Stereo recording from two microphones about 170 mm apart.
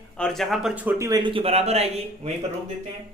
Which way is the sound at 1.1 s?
30° right (ahead or behind).